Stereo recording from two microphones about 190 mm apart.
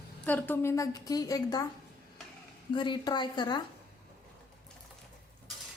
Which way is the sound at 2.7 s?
25° left (ahead or behind).